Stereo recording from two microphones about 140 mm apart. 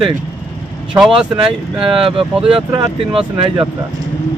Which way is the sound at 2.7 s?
40° right (ahead or behind).